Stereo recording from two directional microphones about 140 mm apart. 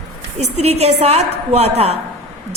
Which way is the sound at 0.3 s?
50° right (ahead or behind).